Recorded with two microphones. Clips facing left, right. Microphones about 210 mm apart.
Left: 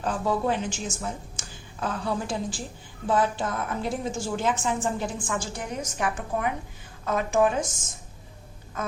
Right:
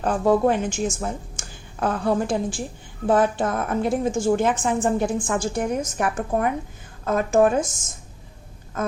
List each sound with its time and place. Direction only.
0.0 s a woman's voice: 50° right (ahead or behind)